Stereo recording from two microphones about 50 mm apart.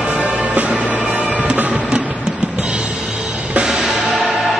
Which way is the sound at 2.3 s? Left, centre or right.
Centre.